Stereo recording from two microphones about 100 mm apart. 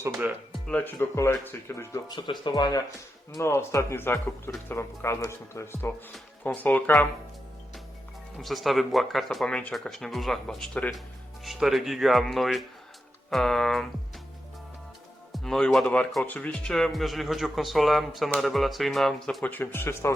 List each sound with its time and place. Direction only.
0.7 s speech: 15° left (ahead or behind)
0.9 s speech: 30° left (ahead or behind)
2.0 s speech: 50° left (ahead or behind)
3.3 s speech: 25° left (ahead or behind)
8.4 s speech: centre (ahead or behind)
15.3 s speech: 5° left (ahead or behind)
16.2 s speech: 15° left (ahead or behind)
19.5 s speech: 20° left (ahead or behind)